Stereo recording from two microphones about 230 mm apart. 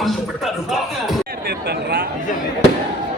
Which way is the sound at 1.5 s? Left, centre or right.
Right.